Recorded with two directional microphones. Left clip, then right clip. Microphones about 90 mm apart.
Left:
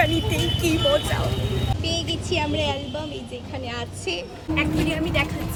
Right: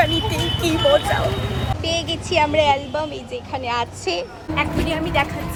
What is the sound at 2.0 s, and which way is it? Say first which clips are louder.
Speech: right 6 dB; 20° right (ahead or behind).